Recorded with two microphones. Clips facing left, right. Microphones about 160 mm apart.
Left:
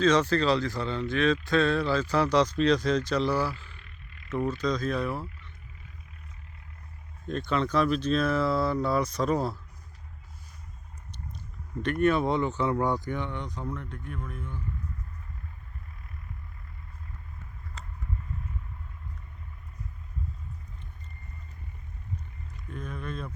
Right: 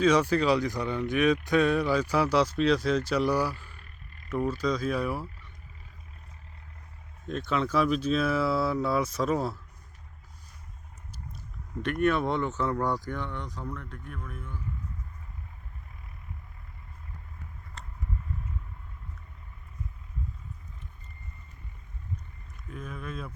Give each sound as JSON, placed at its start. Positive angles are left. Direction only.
{"t": 0.0, "sound": "speech", "side_deg": -10}
{"t": 3.7, "sound": "a sound", "side_deg": -45}
{"t": 4.3, "sound": "speech", "side_deg": -10}
{"t": 7.3, "sound": "speech", "side_deg": 0}
{"t": 11.8, "sound": "speech", "side_deg": 0}
{"t": 13.1, "sound": "speech", "side_deg": 20}
{"t": 13.9, "sound": "speech", "side_deg": 0}
{"t": 22.7, "sound": "a sound", "side_deg": -5}